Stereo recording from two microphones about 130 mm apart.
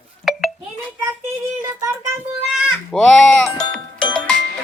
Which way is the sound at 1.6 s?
20° right (ahead or behind).